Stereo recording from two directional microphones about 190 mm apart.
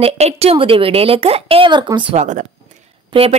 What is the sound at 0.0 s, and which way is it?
A woman's voice, 30° right (ahead or behind).